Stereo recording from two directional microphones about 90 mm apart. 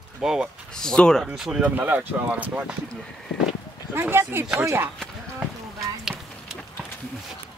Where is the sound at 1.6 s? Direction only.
20° right (ahead or behind).